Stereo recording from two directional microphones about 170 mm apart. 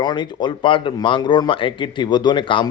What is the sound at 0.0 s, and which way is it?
Speech, 25° left (ahead or behind).